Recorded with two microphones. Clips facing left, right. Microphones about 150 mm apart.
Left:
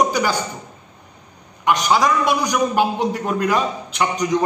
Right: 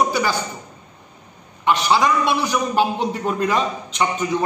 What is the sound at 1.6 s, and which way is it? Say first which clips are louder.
A man's voice: even; 10° left (ahead or behind).